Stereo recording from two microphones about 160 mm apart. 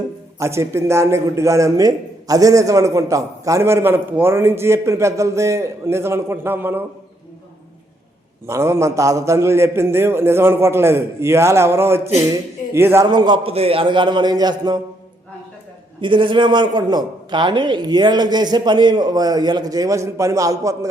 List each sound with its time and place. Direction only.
0.3 s a man's voice: 15° right (ahead or behind)
8.4 s a man's voice: 15° right (ahead or behind)
13.1 s a man's voice: 30° right (ahead or behind)
16.0 s a man's voice: 30° right (ahead or behind)